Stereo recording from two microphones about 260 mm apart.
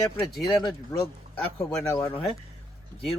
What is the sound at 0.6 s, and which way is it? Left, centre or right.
Speech, centre.